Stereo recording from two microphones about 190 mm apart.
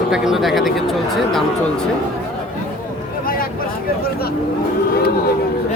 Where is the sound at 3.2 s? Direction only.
50° left (ahead or behind).